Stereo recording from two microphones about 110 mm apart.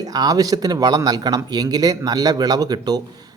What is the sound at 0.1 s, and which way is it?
Speech, 35° right (ahead or behind).